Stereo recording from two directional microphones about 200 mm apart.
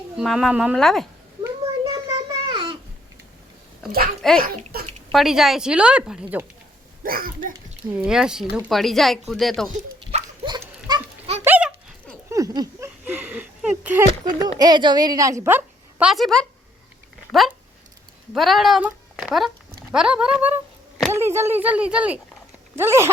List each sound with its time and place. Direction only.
0.2 s speech: centre (ahead or behind)
1.5 s a sound: 20° right (ahead or behind)
4.4 s speech: 45° right (ahead or behind)
5.1 s speech: centre (ahead or behind)
7.0 s a child's voice: 45° right (ahead or behind)
7.9 s speech: 5° right (ahead or behind)
10.1 s dog: 35° right (ahead or behind)
10.8 s goat: 20° right (ahead or behind)
11.4 s a sound: 10° right (ahead or behind)
14.4 s a woman's voice: 20° right (ahead or behind); by 16.5 s centre (ahead or behind)
18.3 s a woman's voice: centre (ahead or behind)